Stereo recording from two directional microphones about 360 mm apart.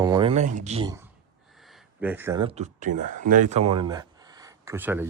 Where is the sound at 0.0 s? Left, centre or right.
Centre.